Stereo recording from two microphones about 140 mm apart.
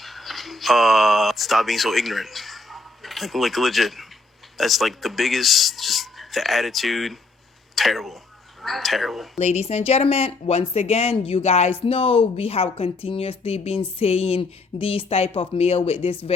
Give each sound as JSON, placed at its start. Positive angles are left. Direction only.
{"t": 0.0, "sound": "speech", "side_deg": 0}
{"t": 9.4, "sound": "speech", "side_deg": 50}